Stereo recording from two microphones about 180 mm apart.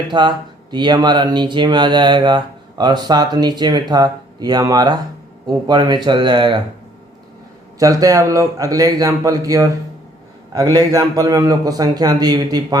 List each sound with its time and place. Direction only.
0.1 s speech: 25° right (ahead or behind)
7.8 s speech: 20° right (ahead or behind)